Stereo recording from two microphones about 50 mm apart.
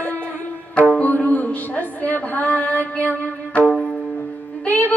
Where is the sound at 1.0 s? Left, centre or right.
Left.